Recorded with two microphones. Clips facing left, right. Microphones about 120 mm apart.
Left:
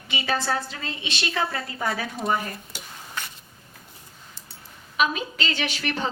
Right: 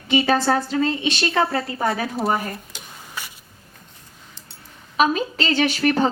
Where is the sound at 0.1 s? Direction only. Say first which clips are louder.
Right 8 dB; 40° right (ahead or behind).